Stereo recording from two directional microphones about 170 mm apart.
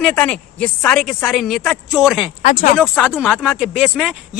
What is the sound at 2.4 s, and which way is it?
Speech, 45° left (ahead or behind).